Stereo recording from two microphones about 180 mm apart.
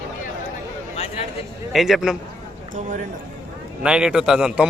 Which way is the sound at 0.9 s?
35° left (ahead or behind).